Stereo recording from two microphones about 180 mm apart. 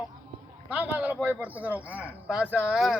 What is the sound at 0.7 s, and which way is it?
Speech, 10° right (ahead or behind).